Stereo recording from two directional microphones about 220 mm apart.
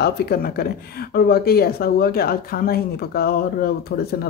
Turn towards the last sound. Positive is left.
turn(degrees=45)  # may be behind; listen again after turning